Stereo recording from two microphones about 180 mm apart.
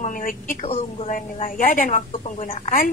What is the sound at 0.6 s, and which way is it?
A woman's voice, 35° left (ahead or behind).